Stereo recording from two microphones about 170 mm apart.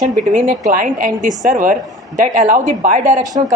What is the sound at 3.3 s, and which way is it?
Speech, 35° right (ahead or behind).